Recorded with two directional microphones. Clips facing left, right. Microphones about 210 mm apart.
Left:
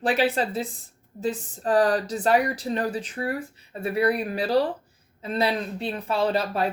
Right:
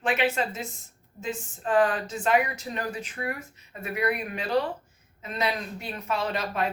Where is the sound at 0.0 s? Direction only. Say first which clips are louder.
Left 3 dB; 35° left (ahead or behind).